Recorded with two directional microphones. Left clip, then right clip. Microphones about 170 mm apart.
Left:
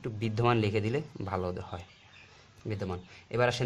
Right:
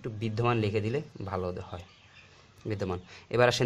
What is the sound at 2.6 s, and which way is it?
Speech, 15° right (ahead or behind).